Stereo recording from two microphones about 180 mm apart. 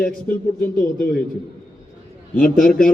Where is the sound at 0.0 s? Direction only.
55° left (ahead or behind).